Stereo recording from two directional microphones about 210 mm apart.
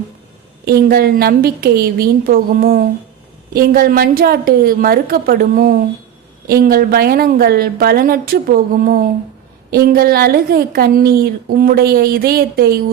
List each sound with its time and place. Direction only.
0.6 s a woman's voice: 45° right (ahead or behind)